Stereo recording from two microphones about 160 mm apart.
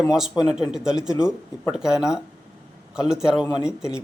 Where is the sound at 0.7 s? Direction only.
5° right (ahead or behind).